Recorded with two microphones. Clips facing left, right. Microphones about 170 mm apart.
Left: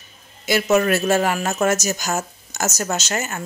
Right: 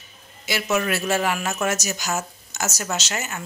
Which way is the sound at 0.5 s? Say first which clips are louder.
Left 6 dB; 45° left (ahead or behind).